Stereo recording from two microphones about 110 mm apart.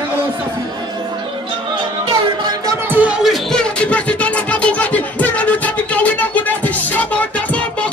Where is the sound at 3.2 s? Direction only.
5° left (ahead or behind).